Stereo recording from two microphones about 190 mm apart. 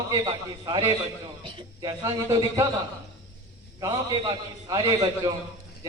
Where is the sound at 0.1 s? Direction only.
20° right (ahead or behind).